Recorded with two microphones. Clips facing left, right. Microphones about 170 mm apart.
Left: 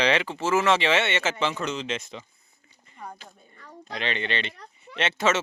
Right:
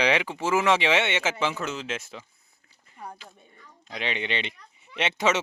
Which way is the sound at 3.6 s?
60° left (ahead or behind).